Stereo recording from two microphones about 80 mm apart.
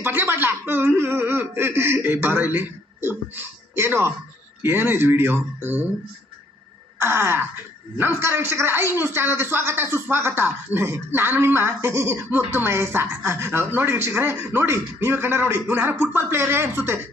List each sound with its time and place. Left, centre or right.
0.0 s a man's voice: right
7.0 s a man's voice: right